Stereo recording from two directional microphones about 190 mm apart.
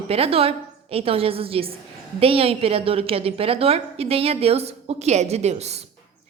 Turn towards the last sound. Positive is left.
turn(degrees=-35)  # may be behind; listen again after turning